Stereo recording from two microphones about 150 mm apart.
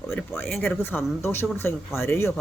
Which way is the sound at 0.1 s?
15° left (ahead or behind).